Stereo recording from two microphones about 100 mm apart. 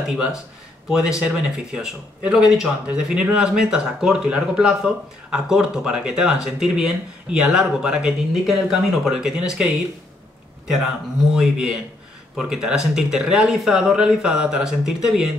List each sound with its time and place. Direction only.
0.8 s speech: 5° right (ahead or behind)
11.3 s speech: 5° right (ahead or behind)